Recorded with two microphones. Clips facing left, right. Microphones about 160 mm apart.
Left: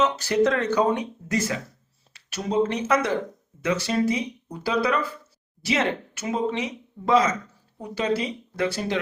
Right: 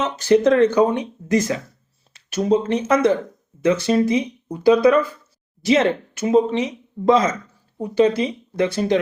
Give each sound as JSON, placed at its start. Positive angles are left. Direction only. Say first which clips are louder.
{"t": 0.0, "sound": "speech", "louder": "right 5 dB", "side_deg": -20}
{"t": 7.8, "sound": "speech", "louder": "right 8 dB", "side_deg": -20}